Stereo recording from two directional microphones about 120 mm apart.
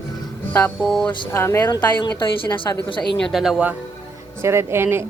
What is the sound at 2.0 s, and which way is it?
A woman's voice, 40° left (ahead or behind).